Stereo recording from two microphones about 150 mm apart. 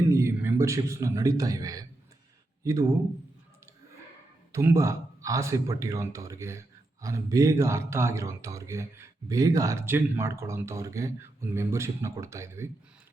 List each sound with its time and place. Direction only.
0.1 s a man's voice: 20° right (ahead or behind)
4.5 s a man's voice: 20° right (ahead or behind)